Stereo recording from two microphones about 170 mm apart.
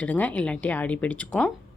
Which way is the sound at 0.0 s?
10° left (ahead or behind).